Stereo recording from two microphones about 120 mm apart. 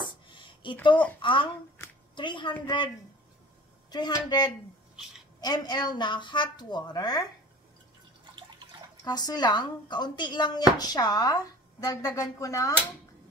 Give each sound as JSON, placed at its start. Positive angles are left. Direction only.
{"t": 0.0, "sound": "a sound", "side_deg": 40}
{"t": 1.2, "sound": "speech", "side_deg": 45}
{"t": 3.9, "sound": "speech", "side_deg": 35}
{"t": 9.0, "sound": "speech", "side_deg": 35}